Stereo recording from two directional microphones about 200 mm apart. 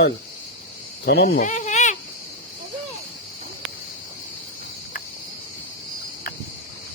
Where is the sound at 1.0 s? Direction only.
55° left (ahead or behind); by 1.9 s 35° left (ahead or behind).